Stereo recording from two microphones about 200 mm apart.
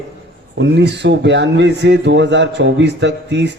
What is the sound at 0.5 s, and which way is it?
A man's voice, 60° right (ahead or behind).